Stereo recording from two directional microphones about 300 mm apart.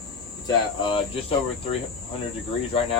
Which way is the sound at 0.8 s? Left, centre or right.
Centre.